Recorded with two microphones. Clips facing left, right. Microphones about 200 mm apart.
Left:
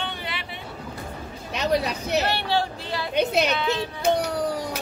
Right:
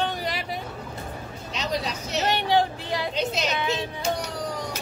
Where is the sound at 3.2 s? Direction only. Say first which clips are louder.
Left 8 dB; 60° left (ahead or behind).